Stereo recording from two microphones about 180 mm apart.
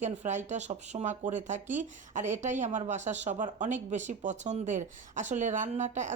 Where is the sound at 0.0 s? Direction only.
40° right (ahead or behind).